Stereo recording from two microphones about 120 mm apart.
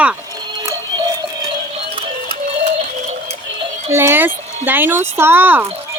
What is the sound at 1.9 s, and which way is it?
Music, 50° right (ahead or behind).